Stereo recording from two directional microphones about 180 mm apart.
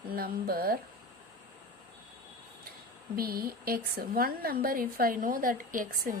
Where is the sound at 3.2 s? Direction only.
55° right (ahead or behind).